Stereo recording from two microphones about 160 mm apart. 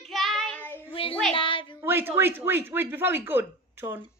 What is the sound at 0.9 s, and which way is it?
Child singing, 35° left (ahead or behind).